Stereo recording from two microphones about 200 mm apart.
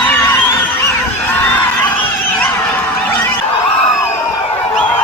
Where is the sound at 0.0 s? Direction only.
10° left (ahead or behind).